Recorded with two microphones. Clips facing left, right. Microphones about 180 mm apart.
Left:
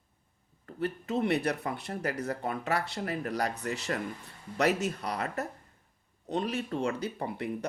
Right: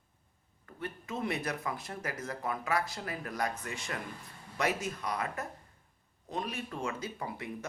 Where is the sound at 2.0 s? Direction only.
65° left (ahead or behind).